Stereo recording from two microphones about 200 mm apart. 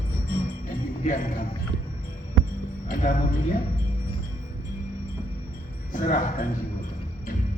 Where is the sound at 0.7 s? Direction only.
40° left (ahead or behind).